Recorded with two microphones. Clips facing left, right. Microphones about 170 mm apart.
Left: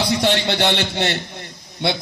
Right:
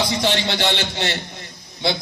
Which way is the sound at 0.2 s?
60° left (ahead or behind).